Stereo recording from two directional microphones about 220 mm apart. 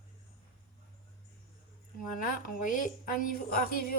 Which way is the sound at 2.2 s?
40° left (ahead or behind).